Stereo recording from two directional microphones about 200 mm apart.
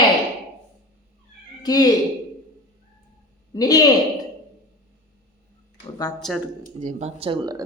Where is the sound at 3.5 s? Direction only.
20° left (ahead or behind).